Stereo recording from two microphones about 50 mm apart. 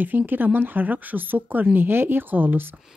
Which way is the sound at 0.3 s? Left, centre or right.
Right.